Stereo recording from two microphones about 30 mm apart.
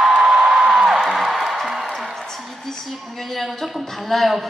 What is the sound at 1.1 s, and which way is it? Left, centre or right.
Music, centre.